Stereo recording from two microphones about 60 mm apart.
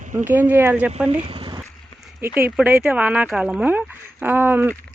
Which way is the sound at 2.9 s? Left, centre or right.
Right.